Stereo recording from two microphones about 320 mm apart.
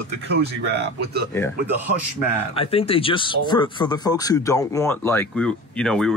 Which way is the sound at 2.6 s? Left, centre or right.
Centre.